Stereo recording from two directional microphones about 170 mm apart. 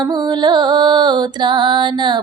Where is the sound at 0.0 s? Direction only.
25° right (ahead or behind).